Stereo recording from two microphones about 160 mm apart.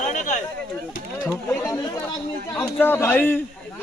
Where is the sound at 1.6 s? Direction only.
20° left (ahead or behind).